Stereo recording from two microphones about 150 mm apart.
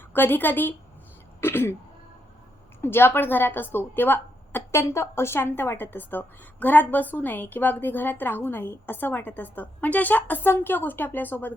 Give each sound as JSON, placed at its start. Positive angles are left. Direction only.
{"t": 0.1, "sound": "speech", "side_deg": 15}
{"t": 2.8, "sound": "speech", "side_deg": 15}